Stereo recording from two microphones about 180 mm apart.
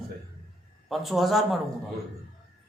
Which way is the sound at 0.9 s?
Centre (ahead or behind).